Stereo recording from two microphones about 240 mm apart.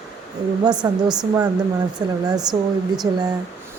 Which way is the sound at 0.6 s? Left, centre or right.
Centre.